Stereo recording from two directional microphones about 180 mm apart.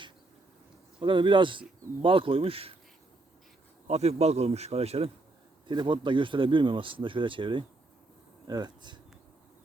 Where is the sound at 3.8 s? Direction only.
35° right (ahead or behind).